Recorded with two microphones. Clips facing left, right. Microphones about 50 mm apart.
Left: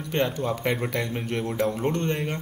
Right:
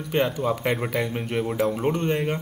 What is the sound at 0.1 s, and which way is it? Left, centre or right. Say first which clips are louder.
Speech: right 2 dB; centre.